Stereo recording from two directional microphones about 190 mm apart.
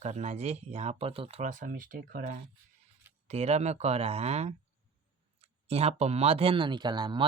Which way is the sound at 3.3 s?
35° right (ahead or behind).